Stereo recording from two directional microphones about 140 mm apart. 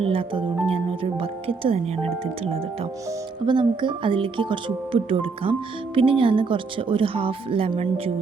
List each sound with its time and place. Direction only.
0.0 s speech: 40° right (ahead or behind)